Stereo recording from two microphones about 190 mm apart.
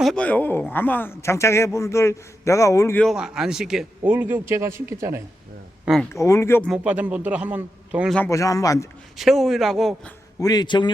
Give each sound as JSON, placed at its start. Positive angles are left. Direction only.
{"t": 0.0, "sound": "a man's voice", "side_deg": 5}
{"t": 5.8, "sound": "speech", "side_deg": 0}
{"t": 6.1, "sound": "a man's voice", "side_deg": 15}
{"t": 6.7, "sound": "a man's voice", "side_deg": -5}
{"t": 8.1, "sound": "a man's voice", "side_deg": 15}
{"t": 9.1, "sound": "speech", "side_deg": 0}
{"t": 10.4, "sound": "speech", "side_deg": 20}